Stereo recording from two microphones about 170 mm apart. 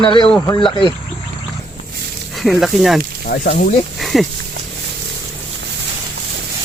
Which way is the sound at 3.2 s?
65° left (ahead or behind).